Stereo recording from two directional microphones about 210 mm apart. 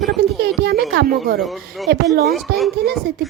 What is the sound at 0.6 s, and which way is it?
Speech, 50° right (ahead or behind).